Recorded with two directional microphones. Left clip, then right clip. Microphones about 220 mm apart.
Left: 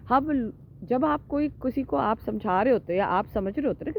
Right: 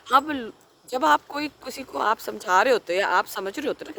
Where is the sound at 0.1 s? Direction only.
15° right (ahead or behind).